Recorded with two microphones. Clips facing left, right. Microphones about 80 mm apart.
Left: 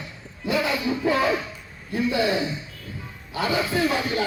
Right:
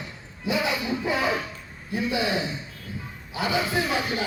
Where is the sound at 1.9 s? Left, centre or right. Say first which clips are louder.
Left 3 dB; centre.